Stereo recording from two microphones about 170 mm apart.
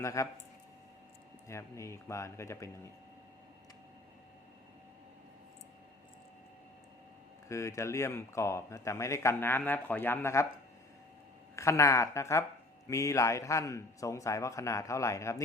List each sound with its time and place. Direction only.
0.0 s a man's voice: 20° left (ahead or behind)
1.5 s a man's voice: 15° left (ahead or behind)
7.4 s a man's voice: 15° left (ahead or behind)
11.5 s a man's voice: 15° left (ahead or behind)